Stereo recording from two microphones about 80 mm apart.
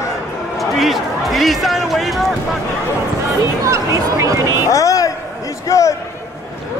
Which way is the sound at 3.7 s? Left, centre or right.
Right.